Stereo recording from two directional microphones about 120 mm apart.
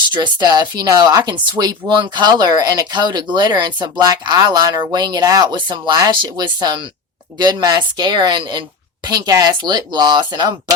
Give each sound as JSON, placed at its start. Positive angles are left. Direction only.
{"t": 0.0, "sound": "speech", "side_deg": -40}